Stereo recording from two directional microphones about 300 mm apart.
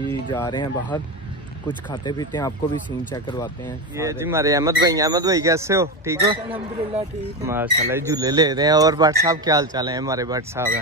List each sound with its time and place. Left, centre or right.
0.3 s speech: centre
3.9 s speech: centre